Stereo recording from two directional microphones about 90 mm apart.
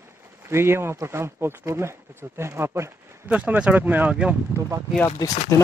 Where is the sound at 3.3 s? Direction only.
15° right (ahead or behind).